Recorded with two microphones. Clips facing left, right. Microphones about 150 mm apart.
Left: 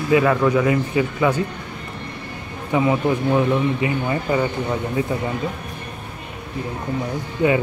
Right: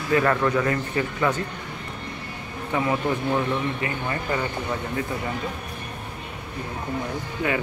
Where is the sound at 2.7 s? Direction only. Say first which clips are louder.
Left 5 dB; 15° left (ahead or behind).